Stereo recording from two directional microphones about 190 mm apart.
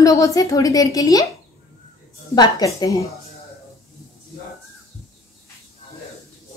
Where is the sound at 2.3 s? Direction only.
20° left (ahead or behind).